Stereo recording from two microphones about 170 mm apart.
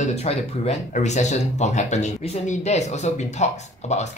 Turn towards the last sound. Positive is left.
turn(degrees=40)  # may be behind; listen again after turning